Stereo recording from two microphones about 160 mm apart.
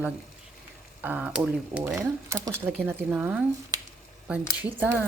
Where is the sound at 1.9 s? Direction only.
15° right (ahead or behind).